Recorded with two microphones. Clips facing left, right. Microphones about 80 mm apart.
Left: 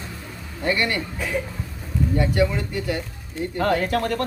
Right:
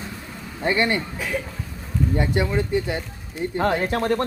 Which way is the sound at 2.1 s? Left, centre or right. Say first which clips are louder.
Left 1 dB; right.